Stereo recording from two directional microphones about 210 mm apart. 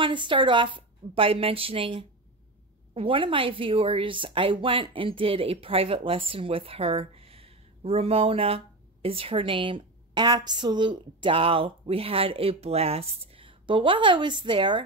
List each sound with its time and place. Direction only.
0.0 s speech: 25° right (ahead or behind)